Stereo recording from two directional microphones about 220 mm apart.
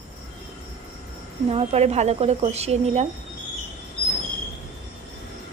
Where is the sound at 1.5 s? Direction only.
30° right (ahead or behind).